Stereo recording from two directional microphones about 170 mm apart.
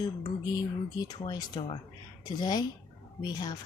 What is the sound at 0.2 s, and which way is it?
Speech, 25° left (ahead or behind).